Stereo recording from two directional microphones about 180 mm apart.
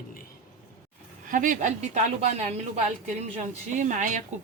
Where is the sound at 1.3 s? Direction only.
45° right (ahead or behind).